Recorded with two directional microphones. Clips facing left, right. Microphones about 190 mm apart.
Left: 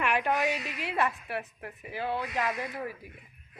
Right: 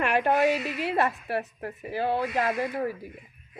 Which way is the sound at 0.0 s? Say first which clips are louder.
Right 5 dB; 35° right (ahead or behind).